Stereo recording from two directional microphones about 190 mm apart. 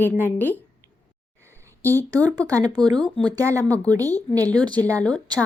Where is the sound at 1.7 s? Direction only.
10° left (ahead or behind).